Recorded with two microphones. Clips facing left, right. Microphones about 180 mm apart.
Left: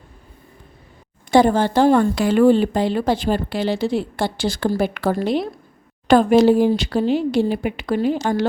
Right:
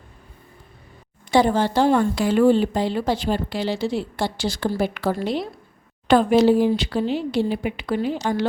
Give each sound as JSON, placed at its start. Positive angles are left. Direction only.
{"t": 1.3, "sound": "a woman's voice", "side_deg": 50}